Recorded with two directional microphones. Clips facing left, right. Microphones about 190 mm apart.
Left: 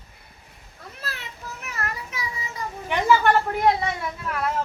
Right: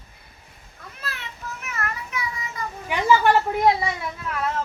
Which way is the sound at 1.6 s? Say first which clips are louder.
Even; 35° left (ahead or behind).